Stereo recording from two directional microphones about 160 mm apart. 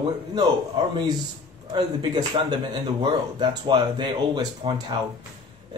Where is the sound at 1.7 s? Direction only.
25° right (ahead or behind).